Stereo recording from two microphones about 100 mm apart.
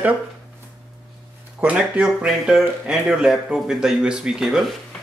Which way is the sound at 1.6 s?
15° right (ahead or behind).